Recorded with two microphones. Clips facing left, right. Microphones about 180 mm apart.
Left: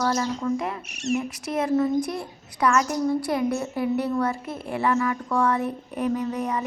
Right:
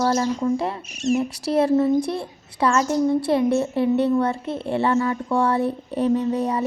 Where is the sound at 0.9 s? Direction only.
65° left (ahead or behind).